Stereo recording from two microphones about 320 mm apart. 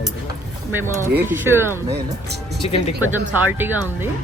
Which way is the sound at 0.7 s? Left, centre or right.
Centre.